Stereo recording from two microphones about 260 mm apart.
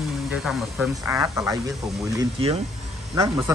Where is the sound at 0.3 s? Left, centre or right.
Centre.